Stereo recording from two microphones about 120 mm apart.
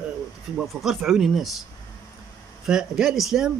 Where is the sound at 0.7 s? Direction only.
Centre (ahead or behind).